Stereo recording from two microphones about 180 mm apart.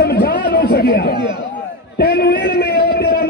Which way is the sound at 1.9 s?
65° left (ahead or behind).